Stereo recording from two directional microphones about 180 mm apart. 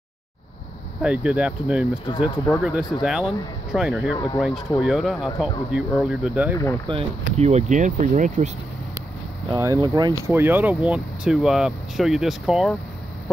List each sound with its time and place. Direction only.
1.0 s speech: 5° right (ahead or behind)
6.9 s speech: 35° right (ahead or behind)
9.5 s speech: 20° right (ahead or behind); by 12.7 s centre (ahead or behind)